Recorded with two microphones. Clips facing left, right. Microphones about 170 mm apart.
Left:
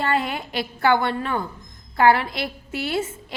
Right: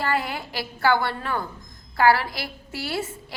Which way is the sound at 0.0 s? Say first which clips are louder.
Left 2 dB; 25° left (ahead or behind).